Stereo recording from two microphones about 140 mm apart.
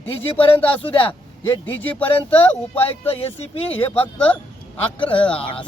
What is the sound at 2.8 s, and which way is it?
Speech, 45° left (ahead or behind).